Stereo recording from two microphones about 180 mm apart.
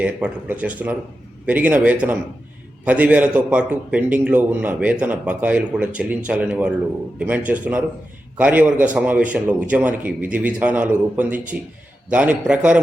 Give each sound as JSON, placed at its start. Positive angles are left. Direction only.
{"t": 0.0, "sound": "a man's voice", "side_deg": -5}